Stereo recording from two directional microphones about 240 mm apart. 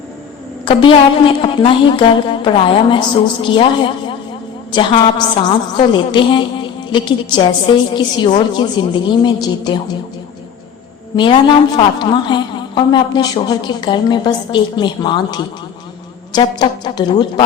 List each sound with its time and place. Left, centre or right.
0.6 s a woman's voice: left
11.2 s a woman's voice: centre